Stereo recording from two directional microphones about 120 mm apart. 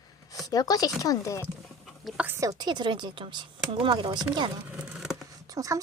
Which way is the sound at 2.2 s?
20° right (ahead or behind).